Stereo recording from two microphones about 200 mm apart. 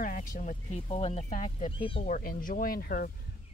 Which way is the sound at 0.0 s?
40° left (ahead or behind).